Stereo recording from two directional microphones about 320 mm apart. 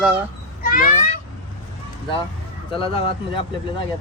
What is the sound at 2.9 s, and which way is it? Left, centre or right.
Speech, centre.